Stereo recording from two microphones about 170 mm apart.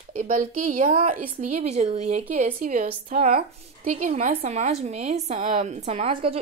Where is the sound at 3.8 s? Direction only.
45° right (ahead or behind).